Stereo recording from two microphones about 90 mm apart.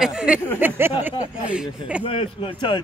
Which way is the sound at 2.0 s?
75° left (ahead or behind).